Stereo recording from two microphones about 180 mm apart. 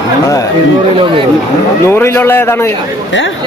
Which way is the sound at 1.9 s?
15° left (ahead or behind).